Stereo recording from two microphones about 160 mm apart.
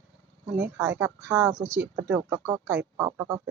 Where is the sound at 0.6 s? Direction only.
15° right (ahead or behind).